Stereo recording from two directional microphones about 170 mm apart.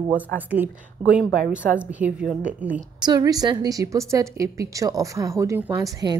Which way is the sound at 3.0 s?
20° right (ahead or behind).